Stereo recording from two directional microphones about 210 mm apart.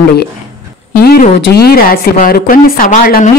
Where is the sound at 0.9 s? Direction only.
45° left (ahead or behind).